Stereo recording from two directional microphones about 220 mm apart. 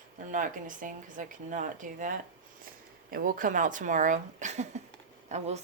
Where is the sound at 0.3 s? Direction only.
35° right (ahead or behind).